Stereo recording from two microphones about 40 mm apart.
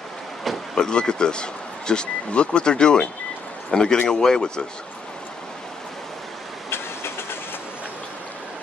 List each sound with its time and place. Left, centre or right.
0.7 s speech: centre
6.7 s vehicle: left